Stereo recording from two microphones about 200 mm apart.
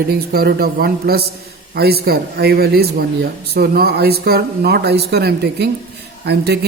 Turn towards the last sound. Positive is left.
turn(degrees=-55)  # may be behind; listen again after turning